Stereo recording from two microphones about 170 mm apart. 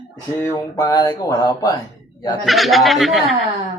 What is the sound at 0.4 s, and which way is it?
Speech, 20° left (ahead or behind).